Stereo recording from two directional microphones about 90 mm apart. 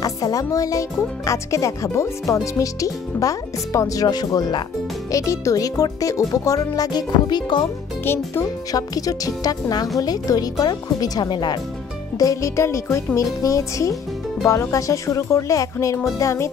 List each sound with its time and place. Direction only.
0.0 s speech: 40° left (ahead or behind)
5.1 s speech: 35° left (ahead or behind); by 7.6 s 55° left (ahead or behind)
8.0 s a child's voice: 25° left (ahead or behind)
8.7 s speech: 40° left (ahead or behind)
12.2 s speech: 40° left (ahead or behind)